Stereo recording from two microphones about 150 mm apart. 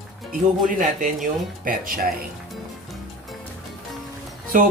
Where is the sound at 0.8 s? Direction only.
60° right (ahead or behind).